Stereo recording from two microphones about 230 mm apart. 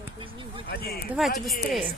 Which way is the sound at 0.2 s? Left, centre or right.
Right.